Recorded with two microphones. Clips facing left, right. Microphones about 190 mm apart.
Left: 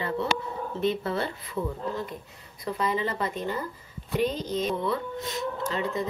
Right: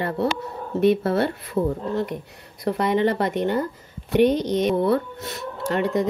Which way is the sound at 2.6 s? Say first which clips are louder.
Right 8 dB; 70° right (ahead or behind).